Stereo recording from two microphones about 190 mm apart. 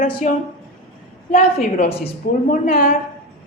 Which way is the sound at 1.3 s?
55° left (ahead or behind).